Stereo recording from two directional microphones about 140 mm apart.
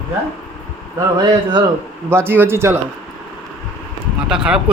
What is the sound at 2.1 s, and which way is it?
Speech, 15° right (ahead or behind).